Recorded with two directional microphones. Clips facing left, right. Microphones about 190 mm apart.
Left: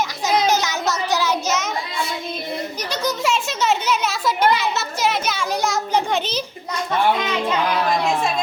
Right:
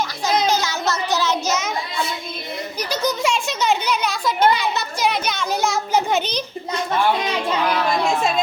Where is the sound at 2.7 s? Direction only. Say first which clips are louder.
Right 5 dB; centre (ahead or behind).